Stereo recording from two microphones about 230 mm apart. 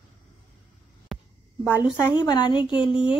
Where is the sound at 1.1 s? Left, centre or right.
Centre.